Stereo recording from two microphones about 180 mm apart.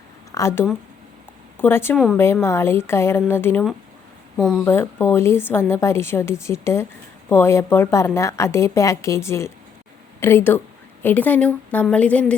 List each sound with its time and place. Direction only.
0.3 s a sound: 15° left (ahead or behind)
1.5 s a woman's voice: 10° left (ahead or behind)
4.4 s speech: centre (ahead or behind)
4.6 s a woman's voice: 15° left (ahead or behind)